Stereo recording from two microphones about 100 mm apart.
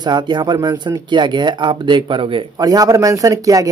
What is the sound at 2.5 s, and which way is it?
Speech, 35° right (ahead or behind).